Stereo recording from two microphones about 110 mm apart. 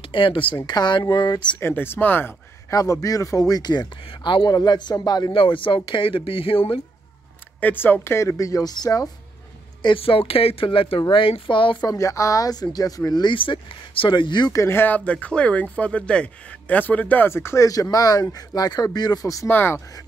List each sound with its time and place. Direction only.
0.1 s speech: 50° left (ahead or behind)
1.6 s speech: 20° left (ahead or behind)
2.7 s speech: 30° left (ahead or behind)
5.3 s speech: 50° left (ahead or behind)
7.6 s speech: 20° left (ahead or behind); by 9.1 s 35° left (ahead or behind)
9.8 s speech: 50° left (ahead or behind)
11.9 s speech: 30° left (ahead or behind); by 14.5 s 45° left (ahead or behind)
14.5 s speech: 25° left (ahead or behind)
19.5 s speech: 20° left (ahead or behind)